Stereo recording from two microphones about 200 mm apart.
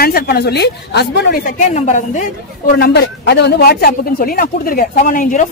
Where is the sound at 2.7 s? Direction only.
55° left (ahead or behind).